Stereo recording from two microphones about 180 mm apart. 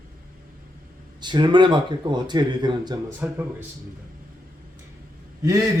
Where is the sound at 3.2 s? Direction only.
10° right (ahead or behind).